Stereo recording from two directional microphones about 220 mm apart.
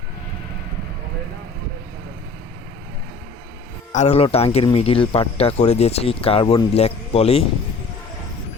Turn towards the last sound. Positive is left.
turn(degrees=25)  # may be behind; listen again after turning